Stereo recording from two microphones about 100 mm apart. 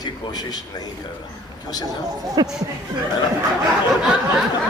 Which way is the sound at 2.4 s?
40° right (ahead or behind).